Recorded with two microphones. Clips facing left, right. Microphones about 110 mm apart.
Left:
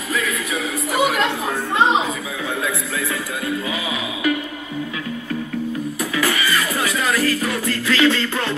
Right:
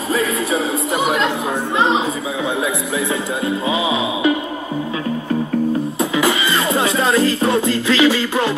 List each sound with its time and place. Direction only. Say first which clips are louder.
0.1 s music: right 5 dB; 30° right (ahead or behind)
3.4 s music: right 6 dB; 25° right (ahead or behind)
5.9 s music: right 4 dB; 20° right (ahead or behind)